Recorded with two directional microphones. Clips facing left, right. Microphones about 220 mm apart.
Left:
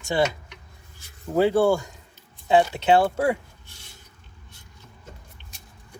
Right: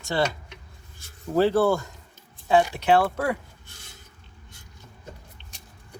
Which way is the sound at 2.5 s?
25° left (ahead or behind).